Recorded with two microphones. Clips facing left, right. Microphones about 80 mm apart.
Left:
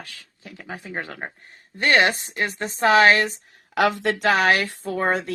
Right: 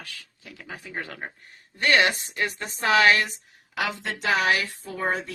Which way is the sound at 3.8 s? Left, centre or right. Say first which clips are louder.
Left 9 dB; left.